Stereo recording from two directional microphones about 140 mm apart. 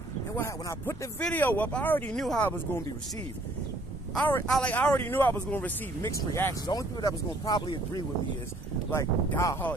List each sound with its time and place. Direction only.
0.4 s speech: 15° left (ahead or behind)
2.1 s speech: 5° left (ahead or behind)
2.4 s speech: 15° left (ahead or behind)
4.1 s speech: 10° left (ahead or behind); by 8.0 s 30° left (ahead or behind)
8.9 s speech: 20° left (ahead or behind)